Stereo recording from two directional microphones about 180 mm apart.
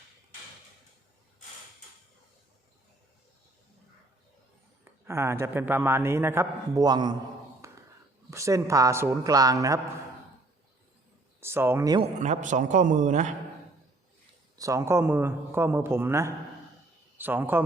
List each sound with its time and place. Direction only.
5.0 s a man's voice: 15° right (ahead or behind)
7.6 s a sound: 15° right (ahead or behind)
8.3 s a man's voice: 15° right (ahead or behind)
11.3 s a man's voice: 15° right (ahead or behind)
12.2 s a man's voice: 40° right (ahead or behind)
14.6 s a man's voice: 15° right (ahead or behind)